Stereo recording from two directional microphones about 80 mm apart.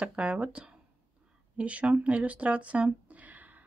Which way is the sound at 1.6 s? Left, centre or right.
Centre.